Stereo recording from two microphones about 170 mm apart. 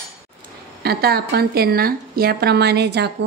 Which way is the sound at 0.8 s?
65° right (ahead or behind).